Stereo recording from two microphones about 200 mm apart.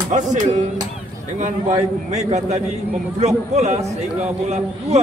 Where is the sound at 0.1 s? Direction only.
40° right (ahead or behind).